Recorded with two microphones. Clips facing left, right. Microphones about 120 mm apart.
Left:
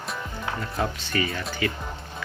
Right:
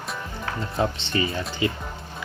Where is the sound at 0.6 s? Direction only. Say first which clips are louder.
Right 5 dB; 25° right (ahead or behind).